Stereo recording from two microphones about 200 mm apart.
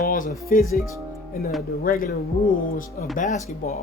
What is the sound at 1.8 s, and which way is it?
Speech, 45° left (ahead or behind).